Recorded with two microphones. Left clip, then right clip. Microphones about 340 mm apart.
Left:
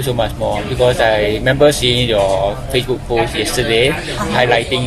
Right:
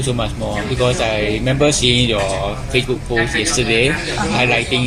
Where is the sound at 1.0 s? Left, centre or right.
Left.